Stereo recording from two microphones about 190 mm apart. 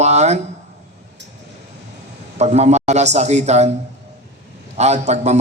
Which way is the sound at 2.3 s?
35° right (ahead or behind).